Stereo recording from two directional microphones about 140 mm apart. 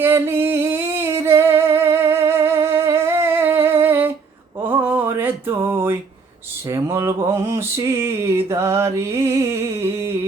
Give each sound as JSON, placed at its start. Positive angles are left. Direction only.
{"t": 0.0, "sound": "singing", "side_deg": -15}
{"t": 4.6, "sound": "mantra", "side_deg": -15}
{"t": 6.7, "sound": "a sound", "side_deg": -20}